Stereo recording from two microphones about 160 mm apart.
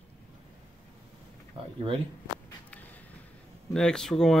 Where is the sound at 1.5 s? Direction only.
35° right (ahead or behind).